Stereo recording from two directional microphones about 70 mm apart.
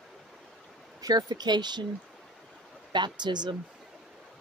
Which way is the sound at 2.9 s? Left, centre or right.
Right.